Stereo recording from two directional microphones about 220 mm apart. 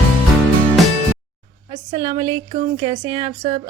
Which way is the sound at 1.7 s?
20° right (ahead or behind).